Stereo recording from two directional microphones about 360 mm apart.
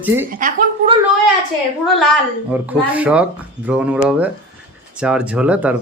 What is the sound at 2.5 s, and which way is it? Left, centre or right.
Speech, centre.